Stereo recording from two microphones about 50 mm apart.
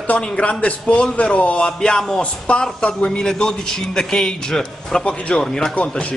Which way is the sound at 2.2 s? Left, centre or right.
Left.